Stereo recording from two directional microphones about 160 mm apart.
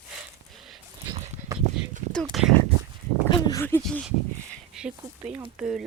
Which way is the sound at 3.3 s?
25° left (ahead or behind).